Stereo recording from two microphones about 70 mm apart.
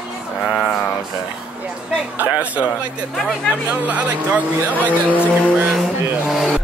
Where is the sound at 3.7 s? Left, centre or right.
Right.